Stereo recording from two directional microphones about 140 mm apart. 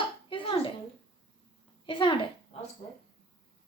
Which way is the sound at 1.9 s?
35° left (ahead or behind).